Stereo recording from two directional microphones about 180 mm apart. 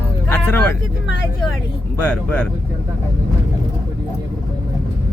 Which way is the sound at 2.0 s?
10° left (ahead or behind).